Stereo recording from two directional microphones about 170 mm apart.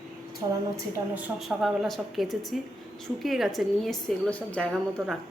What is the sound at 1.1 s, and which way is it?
Speech, centre (ahead or behind).